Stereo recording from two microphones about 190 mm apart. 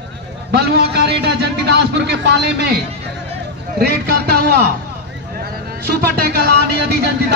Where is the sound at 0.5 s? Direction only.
60° right (ahead or behind).